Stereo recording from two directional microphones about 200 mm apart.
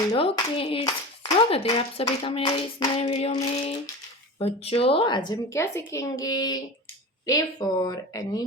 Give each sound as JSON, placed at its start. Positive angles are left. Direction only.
{"t": 0.1, "sound": "speech", "side_deg": 25}